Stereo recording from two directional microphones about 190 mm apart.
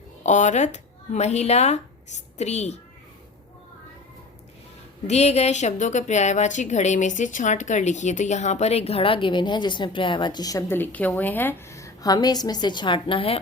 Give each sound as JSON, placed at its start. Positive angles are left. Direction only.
{"t": 0.2, "sound": "speech", "side_deg": 40}
{"t": 5.0, "sound": "a woman's voice", "side_deg": 35}